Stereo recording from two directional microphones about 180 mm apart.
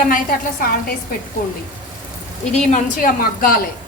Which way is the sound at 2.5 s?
50° left (ahead or behind).